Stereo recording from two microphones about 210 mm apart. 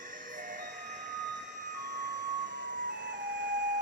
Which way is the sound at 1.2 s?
55° right (ahead or behind).